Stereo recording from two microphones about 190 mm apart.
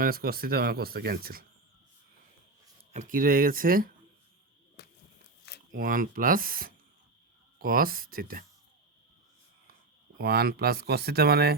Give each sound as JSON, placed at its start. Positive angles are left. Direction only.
{"t": 0.0, "sound": "speech", "side_deg": -50}
{"t": 2.9, "sound": "speech", "side_deg": -40}
{"t": 5.7, "sound": "speech", "side_deg": -50}
{"t": 10.2, "sound": "speech", "side_deg": -55}